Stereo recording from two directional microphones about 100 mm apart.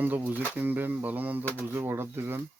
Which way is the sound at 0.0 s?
20° right (ahead or behind).